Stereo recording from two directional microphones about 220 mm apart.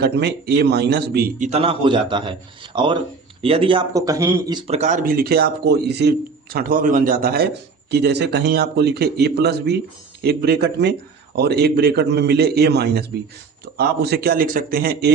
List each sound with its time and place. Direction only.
0.0 s speech: 50° right (ahead or behind)
1.5 s a man's voice: 25° right (ahead or behind); by 15.1 s 45° right (ahead or behind)